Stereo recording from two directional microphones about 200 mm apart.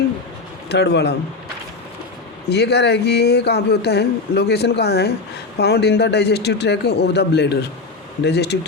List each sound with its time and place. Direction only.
0.7 s a man's voice: 55° left (ahead or behind)
2.5 s a man's voice: 55° left (ahead or behind)